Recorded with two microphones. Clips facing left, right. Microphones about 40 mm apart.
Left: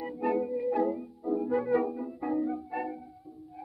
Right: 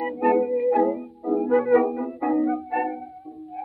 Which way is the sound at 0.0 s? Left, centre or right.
Right.